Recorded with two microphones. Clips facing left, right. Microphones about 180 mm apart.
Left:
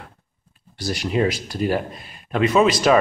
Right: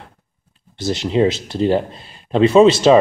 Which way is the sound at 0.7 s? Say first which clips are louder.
Right 5 dB; 25° right (ahead or behind).